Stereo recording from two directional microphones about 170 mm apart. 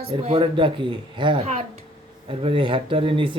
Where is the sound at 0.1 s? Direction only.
35° right (ahead or behind).